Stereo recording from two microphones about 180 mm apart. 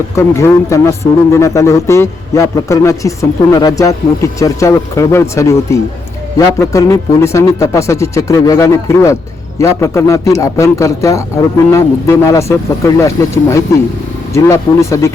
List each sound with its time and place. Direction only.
0.2 s speech: 15° left (ahead or behind)